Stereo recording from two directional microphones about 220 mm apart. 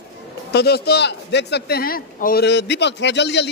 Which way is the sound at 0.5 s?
45° left (ahead or behind).